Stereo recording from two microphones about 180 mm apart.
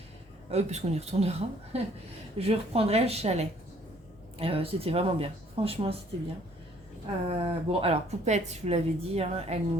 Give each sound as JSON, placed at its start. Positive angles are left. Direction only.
{"t": 0.5, "sound": "speech", "side_deg": -35}
{"t": 7.3, "sound": "speech", "side_deg": -30}